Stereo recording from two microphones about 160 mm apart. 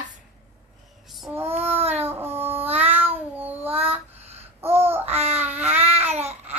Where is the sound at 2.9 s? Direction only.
40° right (ahead or behind).